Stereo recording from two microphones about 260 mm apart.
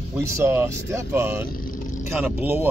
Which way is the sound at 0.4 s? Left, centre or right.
Centre.